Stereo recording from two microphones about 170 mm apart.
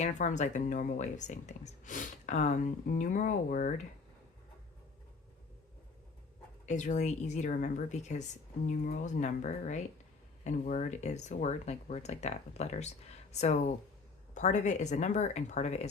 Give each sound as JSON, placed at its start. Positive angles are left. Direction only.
{"t": 0.0, "sound": "speech", "side_deg": 45}
{"t": 6.7, "sound": "speech", "side_deg": 45}